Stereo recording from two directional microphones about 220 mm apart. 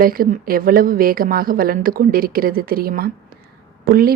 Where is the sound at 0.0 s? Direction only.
40° right (ahead or behind).